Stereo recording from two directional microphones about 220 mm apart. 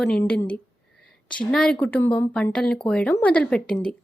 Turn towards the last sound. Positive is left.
turn(degrees=5)  # may be behind; listen again after turning